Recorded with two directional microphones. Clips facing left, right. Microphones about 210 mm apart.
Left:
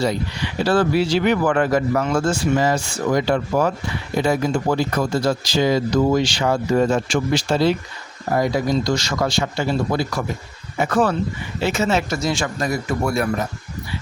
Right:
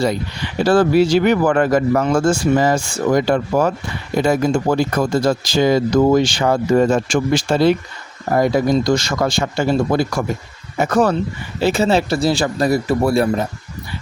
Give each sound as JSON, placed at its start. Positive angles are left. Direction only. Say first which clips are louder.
{"t": 0.6, "sound": "speech", "louder": "right 5 dB", "side_deg": -45}
{"t": 11.6, "sound": "speech", "louder": "right 5 dB", "side_deg": -35}